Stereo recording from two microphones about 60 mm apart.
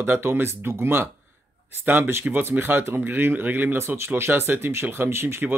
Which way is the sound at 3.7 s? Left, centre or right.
Right.